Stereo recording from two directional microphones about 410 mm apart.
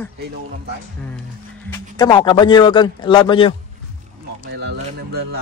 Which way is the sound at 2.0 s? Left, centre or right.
Centre.